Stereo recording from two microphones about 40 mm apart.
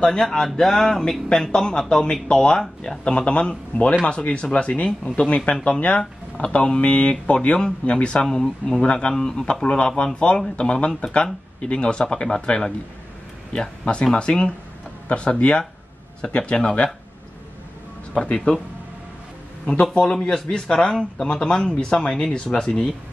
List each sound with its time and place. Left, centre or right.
0.0 s speech: centre; by 5.7 s left
5.9 s speech: left
8.4 s speech: centre
8.8 s speech: left
18.2 s speech: left
19.6 s speech: left